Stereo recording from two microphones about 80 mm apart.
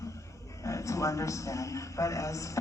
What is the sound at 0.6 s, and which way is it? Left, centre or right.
A man's voice, left.